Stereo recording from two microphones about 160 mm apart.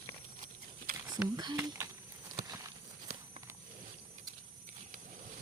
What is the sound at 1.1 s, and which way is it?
Speech, 25° right (ahead or behind).